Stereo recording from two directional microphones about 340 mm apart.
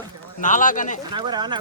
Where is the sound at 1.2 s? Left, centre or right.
Centre.